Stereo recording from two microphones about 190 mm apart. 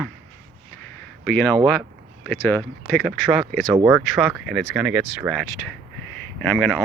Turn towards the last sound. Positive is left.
turn(degrees=5)  # may be behind; listen again after turning